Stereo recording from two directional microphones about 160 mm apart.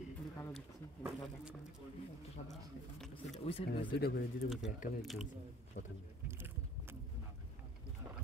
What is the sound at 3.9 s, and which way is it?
Speech, 85° left.